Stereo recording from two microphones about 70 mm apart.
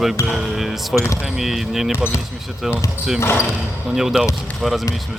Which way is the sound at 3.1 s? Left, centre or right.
Left.